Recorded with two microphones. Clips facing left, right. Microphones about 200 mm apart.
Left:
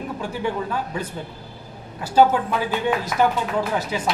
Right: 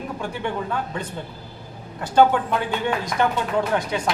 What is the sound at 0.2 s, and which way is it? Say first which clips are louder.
A man's voice: left 2 dB; 5° left (ahead or behind).